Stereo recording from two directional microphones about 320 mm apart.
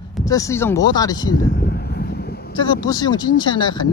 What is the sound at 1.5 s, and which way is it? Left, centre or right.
Vehicle, left.